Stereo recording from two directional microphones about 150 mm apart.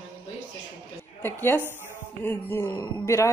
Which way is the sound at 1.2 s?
15° left (ahead or behind).